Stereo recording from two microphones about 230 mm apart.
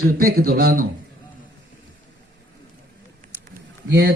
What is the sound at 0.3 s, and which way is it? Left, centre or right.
Speech, right.